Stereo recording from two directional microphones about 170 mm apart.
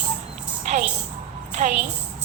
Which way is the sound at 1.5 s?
45° right (ahead or behind).